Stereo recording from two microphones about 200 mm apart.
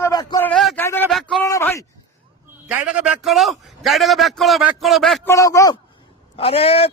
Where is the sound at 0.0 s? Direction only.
20° left (ahead or behind).